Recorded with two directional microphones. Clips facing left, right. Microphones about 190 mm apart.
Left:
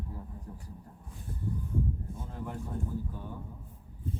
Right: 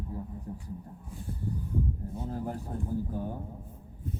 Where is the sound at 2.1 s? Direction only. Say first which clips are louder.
Right 5 dB; 35° right (ahead or behind).